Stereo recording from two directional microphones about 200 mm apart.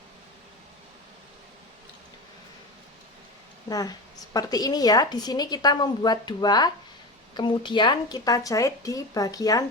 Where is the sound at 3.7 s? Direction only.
20° left (ahead or behind).